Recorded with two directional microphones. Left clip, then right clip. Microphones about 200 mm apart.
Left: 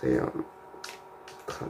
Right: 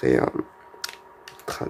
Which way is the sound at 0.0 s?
40° right (ahead or behind).